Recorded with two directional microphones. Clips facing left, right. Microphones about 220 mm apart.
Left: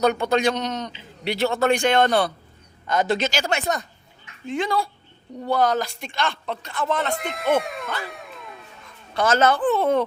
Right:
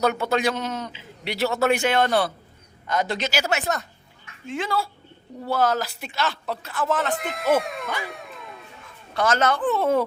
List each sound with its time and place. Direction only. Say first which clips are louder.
0.0 s a man's voice: left 2 dB; 5° right (ahead or behind)
2.9 s speech: left 4 dB; 25° left (ahead or behind)
3.2 s a man's voice: left 1 dB; 5° right (ahead or behind)
8.0 s music: even; centre (ahead or behind)
9.2 s speech: left 3 dB; 30° left (ahead or behind)
9.6 s a man's voice: left 1 dB; centre (ahead or behind)